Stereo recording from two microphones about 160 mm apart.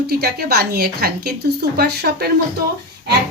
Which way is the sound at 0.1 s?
85° right.